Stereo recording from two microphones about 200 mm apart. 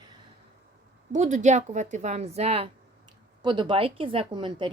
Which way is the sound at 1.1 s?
40° right (ahead or behind).